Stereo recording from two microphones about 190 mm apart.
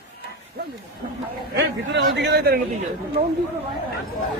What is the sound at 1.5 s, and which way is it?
A man's voice, 65° right (ahead or behind).